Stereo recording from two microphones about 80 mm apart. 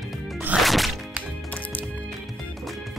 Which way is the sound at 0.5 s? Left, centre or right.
Centre.